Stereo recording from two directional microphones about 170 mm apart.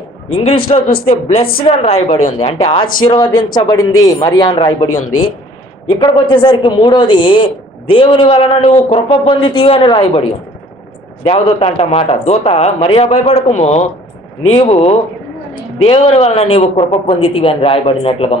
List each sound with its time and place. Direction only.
0.3 s a woman's voice: 35° left (ahead or behind)
5.9 s a woman's voice: 25° left (ahead or behind)
11.2 s a woman's voice: 35° left (ahead or behind)